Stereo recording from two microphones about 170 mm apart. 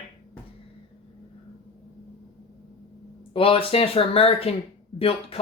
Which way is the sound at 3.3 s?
35° left (ahead or behind).